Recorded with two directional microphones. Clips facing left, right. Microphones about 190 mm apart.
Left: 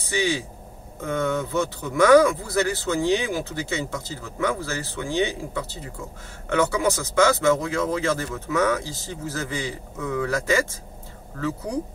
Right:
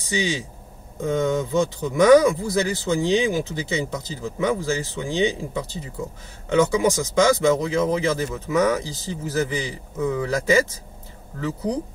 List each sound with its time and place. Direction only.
0.0 s speech: 15° right (ahead or behind)